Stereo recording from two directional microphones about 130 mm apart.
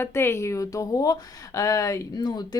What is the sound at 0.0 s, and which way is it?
Speech, 20° left (ahead or behind).